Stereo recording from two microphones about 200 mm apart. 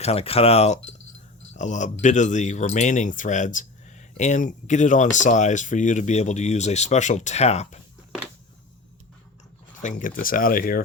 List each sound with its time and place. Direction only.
0.0 s speech: 30° left (ahead or behind)
9.8 s speech: 40° left (ahead or behind)